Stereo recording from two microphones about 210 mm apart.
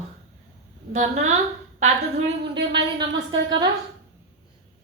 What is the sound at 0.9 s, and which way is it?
Speech, 35° right (ahead or behind).